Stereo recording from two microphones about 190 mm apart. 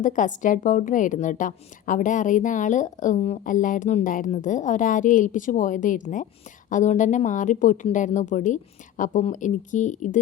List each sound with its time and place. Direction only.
0.0 s a woman's voice: 40° left (ahead or behind)